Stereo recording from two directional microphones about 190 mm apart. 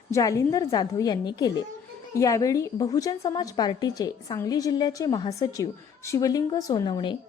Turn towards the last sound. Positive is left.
turn(degrees=25)  # may be behind; listen again after turning